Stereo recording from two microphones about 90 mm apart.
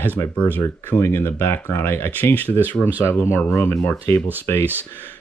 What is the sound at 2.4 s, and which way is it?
Speech, 20° right (ahead or behind).